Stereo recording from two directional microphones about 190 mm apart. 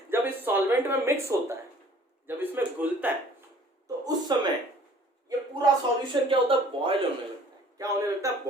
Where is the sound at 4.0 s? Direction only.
20° right (ahead or behind).